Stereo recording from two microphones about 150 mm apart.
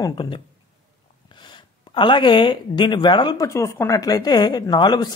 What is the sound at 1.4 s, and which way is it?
Speech, 30° left (ahead or behind).